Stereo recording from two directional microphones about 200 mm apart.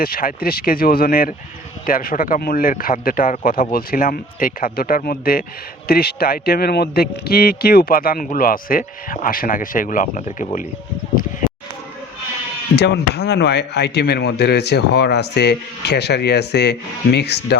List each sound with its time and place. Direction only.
0.0 s a man's voice: 45° left (ahead or behind)
11.1 s speech: 45° left (ahead or behind)
12.7 s speech: 55° left (ahead or behind)